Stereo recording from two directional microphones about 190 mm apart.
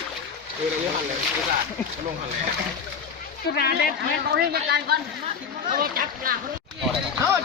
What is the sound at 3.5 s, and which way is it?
Speech, 55° left (ahead or behind).